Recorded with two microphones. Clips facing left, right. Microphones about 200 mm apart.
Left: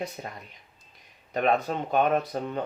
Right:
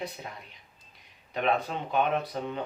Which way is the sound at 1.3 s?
45° left (ahead or behind).